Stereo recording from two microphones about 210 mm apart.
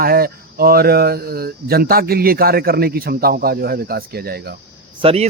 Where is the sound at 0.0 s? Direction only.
45° right (ahead or behind).